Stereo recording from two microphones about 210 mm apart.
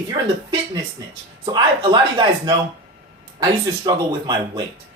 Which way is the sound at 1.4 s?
20° right (ahead or behind).